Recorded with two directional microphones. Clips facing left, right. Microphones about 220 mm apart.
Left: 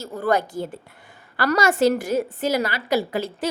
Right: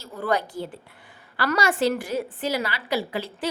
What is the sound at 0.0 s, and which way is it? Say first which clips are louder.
A woman's voice: left 4 dB; 45° left (ahead or behind).